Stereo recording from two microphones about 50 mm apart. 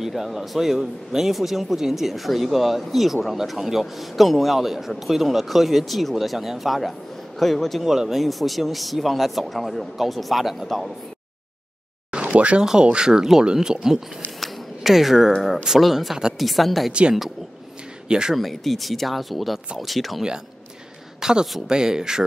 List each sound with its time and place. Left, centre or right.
0.0 s speech: centre
12.1 s a sound: right
12.6 s speech: centre
14.4 s a sound: centre
15.8 s speech: centre
18.0 s speech: centre
18.3 s speech: centre
21.2 s speech: centre